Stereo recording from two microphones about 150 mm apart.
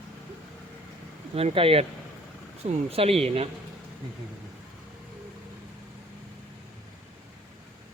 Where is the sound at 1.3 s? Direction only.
40° right (ahead or behind).